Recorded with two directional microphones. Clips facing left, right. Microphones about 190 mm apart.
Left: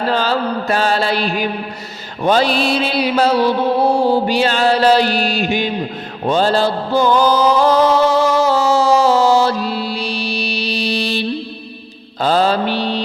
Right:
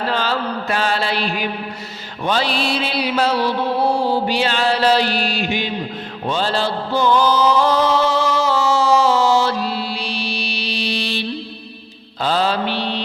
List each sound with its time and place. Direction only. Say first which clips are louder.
0.0 s mantra: left 4 dB; 40° left (ahead or behind)